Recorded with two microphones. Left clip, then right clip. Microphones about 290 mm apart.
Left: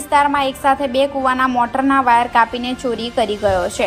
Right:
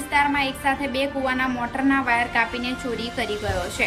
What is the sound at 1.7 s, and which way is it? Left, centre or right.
Speech, left.